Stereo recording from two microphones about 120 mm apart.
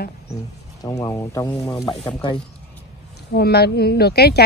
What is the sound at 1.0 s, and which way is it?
Speech, 30° left (ahead or behind).